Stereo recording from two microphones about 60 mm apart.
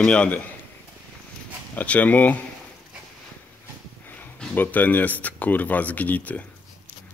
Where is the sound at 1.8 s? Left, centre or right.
Left.